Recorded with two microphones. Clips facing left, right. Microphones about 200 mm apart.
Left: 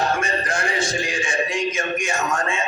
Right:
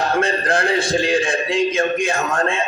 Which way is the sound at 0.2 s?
60° right (ahead or behind).